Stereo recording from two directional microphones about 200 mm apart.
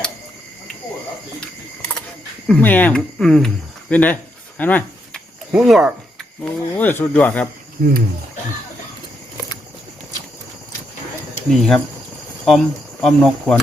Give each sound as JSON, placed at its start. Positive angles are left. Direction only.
{"t": 2.5, "sound": "speech", "side_deg": 10}
{"t": 5.5, "sound": "speech", "side_deg": -5}
{"t": 7.8, "sound": "speech", "side_deg": -50}
{"t": 11.5, "sound": "speech", "side_deg": 0}